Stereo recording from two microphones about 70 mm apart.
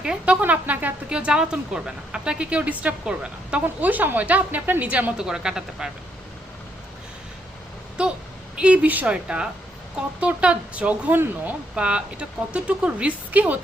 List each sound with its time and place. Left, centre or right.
0.0 s speech: centre
0.4 s a woman's voice: right
5.1 s speech: centre
8.5 s speech: centre